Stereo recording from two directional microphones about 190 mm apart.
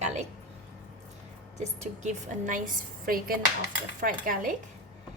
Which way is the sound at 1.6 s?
40° right (ahead or behind).